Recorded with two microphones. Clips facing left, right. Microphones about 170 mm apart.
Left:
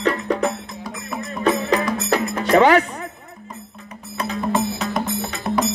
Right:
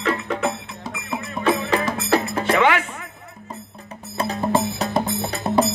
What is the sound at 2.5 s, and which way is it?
Music, 35° left (ahead or behind).